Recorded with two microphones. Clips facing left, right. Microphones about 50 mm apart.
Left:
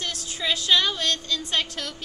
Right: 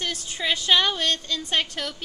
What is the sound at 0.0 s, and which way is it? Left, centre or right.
Child singing, right.